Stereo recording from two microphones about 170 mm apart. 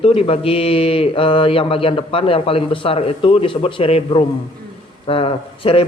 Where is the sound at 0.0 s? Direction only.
35° left (ahead or behind).